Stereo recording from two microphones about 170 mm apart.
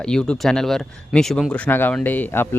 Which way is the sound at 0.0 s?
5° left (ahead or behind).